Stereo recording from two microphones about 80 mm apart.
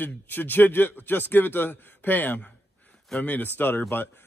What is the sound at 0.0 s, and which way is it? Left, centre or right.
A man's voice, left.